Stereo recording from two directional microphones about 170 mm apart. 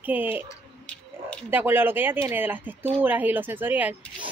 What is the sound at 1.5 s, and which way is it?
A woman's voice, 10° right (ahead or behind).